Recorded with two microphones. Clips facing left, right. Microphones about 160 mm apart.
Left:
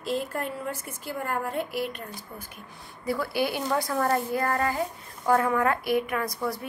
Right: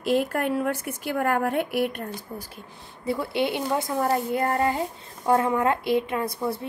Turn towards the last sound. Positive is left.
turn(degrees=-30)  # may be behind; listen again after turning